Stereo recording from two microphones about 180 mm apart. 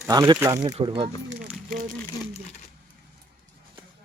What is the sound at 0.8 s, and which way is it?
Speech, 30° right (ahead or behind).